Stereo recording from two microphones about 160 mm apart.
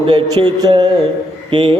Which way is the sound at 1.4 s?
35° right (ahead or behind).